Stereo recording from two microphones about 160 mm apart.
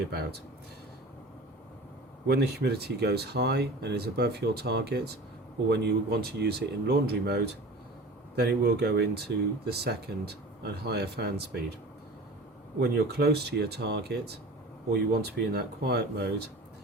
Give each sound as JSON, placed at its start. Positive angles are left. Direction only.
{"t": 0.1, "sound": "speech", "side_deg": -90}
{"t": 2.2, "sound": "speech", "side_deg": -90}
{"t": 12.8, "sound": "speech", "side_deg": -90}